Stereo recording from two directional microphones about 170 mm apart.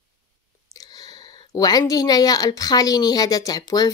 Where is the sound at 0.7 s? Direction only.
20° left (ahead or behind).